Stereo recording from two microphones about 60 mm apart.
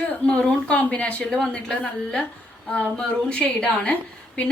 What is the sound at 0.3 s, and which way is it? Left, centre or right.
A woman's voice, centre.